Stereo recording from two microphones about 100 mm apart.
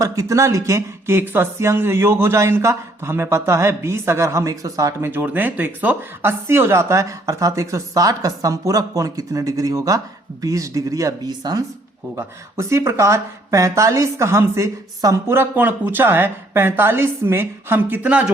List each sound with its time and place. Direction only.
0.0 s speech: 30° right (ahead or behind)
12.1 s speech: 30° right (ahead or behind)